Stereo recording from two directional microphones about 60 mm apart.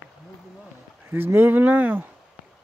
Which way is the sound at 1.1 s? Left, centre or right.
Right.